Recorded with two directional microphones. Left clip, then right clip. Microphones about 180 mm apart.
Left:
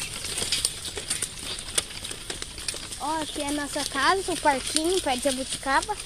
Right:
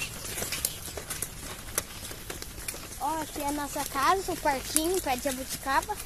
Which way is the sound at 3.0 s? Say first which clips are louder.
Left 2 dB; 60° left (ahead or behind).